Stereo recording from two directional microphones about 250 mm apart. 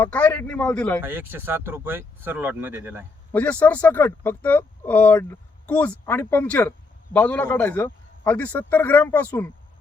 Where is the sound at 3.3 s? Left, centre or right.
Centre.